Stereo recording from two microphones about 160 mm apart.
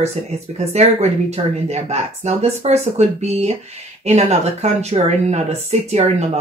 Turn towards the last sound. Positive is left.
turn(degrees=-45)  # may be behind; listen again after turning